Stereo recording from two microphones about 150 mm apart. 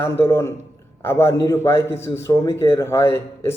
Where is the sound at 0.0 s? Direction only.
15° left (ahead or behind).